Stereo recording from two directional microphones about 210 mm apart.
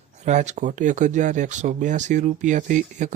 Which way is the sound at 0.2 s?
35° right (ahead or behind).